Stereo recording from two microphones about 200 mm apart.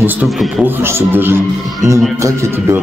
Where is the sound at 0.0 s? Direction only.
5° right (ahead or behind).